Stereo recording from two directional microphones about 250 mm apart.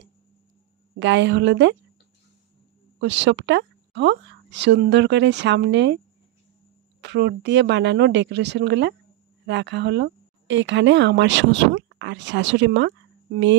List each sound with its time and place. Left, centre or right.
0.9 s a woman's voice: right
3.0 s a woman's voice: right
7.0 s a woman's voice: right